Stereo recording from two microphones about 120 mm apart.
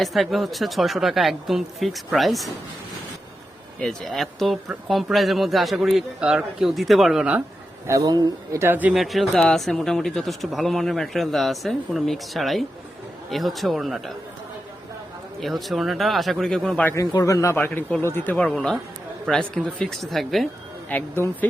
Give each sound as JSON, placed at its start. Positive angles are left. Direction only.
{"t": 0.0, "sound": "speech", "side_deg": 0}
{"t": 3.8, "sound": "speech", "side_deg": 5}
{"t": 7.9, "sound": "speech", "side_deg": -30}
{"t": 8.9, "sound": "speech", "side_deg": 0}
{"t": 15.4, "sound": "speech", "side_deg": 0}
{"t": 17.1, "sound": "speech", "side_deg": 30}
{"t": 20.9, "sound": "speech", "side_deg": 15}